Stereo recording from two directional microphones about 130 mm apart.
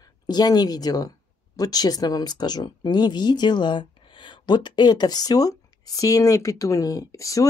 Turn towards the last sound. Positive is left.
turn(degrees=25)  # may be behind; listen again after turning